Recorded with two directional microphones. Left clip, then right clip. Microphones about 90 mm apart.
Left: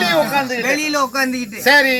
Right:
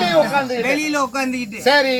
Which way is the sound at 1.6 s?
25° right (ahead or behind).